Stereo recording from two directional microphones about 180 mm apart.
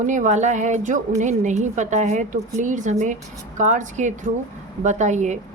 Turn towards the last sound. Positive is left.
turn(degrees=-40)  # may be behind; listen again after turning